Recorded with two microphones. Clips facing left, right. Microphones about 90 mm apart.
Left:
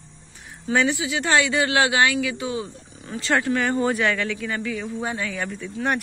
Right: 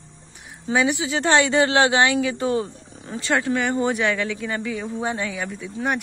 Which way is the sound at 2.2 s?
40° right (ahead or behind).